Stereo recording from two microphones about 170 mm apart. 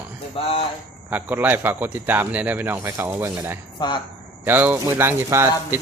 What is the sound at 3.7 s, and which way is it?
Speech, 25° left (ahead or behind).